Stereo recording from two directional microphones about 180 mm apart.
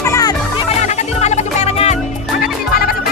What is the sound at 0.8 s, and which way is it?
Music, 40° left (ahead or behind).